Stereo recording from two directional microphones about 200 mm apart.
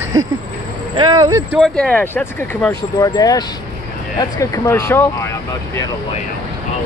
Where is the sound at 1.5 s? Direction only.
5° left (ahead or behind).